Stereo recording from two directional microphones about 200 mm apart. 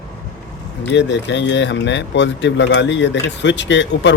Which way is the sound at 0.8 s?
60° left (ahead or behind).